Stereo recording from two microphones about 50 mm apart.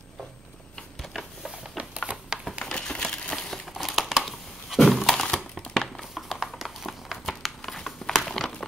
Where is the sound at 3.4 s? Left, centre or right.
Centre.